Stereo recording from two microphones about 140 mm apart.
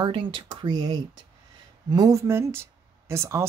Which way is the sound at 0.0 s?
35° right (ahead or behind).